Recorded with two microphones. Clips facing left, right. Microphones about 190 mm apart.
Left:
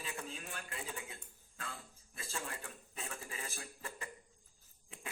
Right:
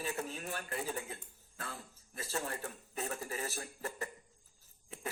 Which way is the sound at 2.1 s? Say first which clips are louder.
Right 6 dB; 40° right (ahead or behind).